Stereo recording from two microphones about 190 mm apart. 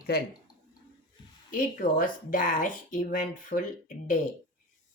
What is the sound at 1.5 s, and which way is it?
Speech, 45° left (ahead or behind).